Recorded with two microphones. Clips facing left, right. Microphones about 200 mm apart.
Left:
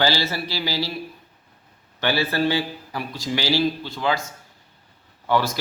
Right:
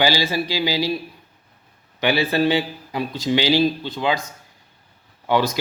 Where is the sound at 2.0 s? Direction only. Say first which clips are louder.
Right 3 dB; 15° right (ahead or behind).